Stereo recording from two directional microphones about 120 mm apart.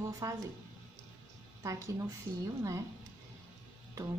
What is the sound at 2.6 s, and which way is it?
Speech, 25° right (ahead or behind).